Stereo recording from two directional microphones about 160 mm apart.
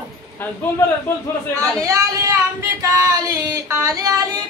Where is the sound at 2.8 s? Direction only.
20° right (ahead or behind).